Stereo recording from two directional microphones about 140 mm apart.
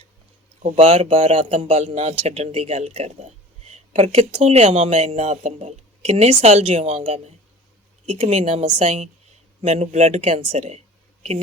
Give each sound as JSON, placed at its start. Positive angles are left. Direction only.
{"t": 0.6, "sound": "speech", "side_deg": -50}